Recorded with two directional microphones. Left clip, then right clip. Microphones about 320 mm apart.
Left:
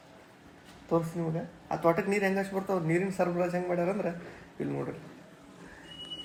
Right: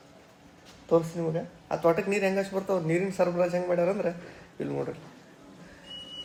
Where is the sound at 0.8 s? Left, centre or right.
Centre.